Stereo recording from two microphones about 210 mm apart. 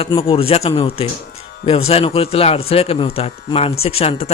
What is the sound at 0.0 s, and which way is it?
A man's voice, 25° left (ahead or behind).